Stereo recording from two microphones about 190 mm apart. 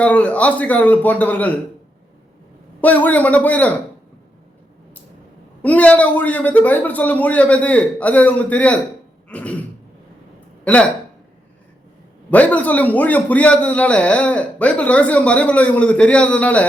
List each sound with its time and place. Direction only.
0.0 s a man's voice: 5° left (ahead or behind)
2.8 s a man's voice: 10° left (ahead or behind)
5.6 s a man's voice: 5° left (ahead or behind)
12.3 s a man's voice: 10° left (ahead or behind)